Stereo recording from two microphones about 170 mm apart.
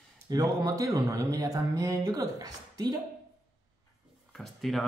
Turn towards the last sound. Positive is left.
turn(degrees=0)  # may be behind; listen again after turning